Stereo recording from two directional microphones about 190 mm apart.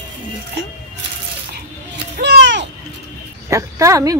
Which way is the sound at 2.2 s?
65° right (ahead or behind).